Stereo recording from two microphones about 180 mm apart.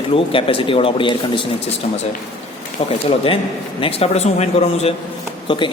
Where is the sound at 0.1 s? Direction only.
30° left (ahead or behind).